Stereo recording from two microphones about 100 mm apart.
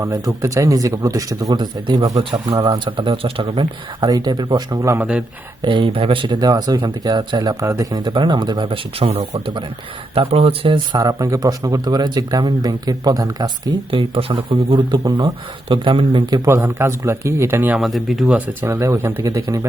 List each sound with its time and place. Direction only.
0.0 s speech: 35° right (ahead or behind)
2.6 s speech: 50° right (ahead or behind)
4.0 s speech: 45° right (ahead or behind)
4.9 s speech: 10° right (ahead or behind)
5.6 s speech: 60° right (ahead or behind)
7.6 s speech: 30° right (ahead or behind); by 9.1 s 70° right (ahead or behind)
9.1 s speech: 50° right (ahead or behind)
10.2 s speech: 70° right (ahead or behind)
10.9 s speech: 35° right (ahead or behind)
13.9 s speech: 65° right (ahead or behind); by 16.5 s 40° right (ahead or behind)
16.5 s speech: 25° right (ahead or behind)
17.7 s speech: centre (ahead or behind)
18.3 s speech: 15° right (ahead or behind)
18.7 s speech: 25° right (ahead or behind)